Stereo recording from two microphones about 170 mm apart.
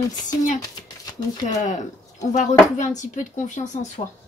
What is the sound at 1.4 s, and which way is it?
Speech, 45° left (ahead or behind).